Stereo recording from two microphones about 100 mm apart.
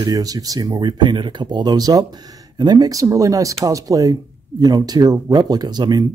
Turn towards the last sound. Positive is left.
turn(degrees=-40)  # may be behind; listen again after turning